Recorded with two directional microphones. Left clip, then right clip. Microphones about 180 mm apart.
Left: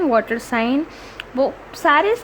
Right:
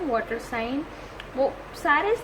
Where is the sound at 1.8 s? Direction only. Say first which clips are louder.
Left 7 dB; 50° left (ahead or behind).